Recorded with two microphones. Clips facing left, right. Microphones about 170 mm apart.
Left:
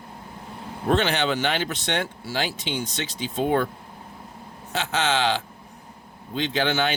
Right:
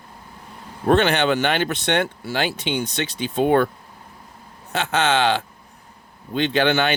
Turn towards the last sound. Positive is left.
turn(degrees=-65)  # may be behind; listen again after turning